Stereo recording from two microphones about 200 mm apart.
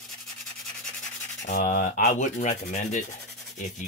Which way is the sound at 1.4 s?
40° left (ahead or behind).